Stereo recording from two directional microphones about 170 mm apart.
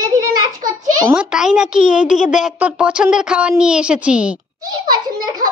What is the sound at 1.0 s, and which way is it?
A woman's voice, 5° right (ahead or behind).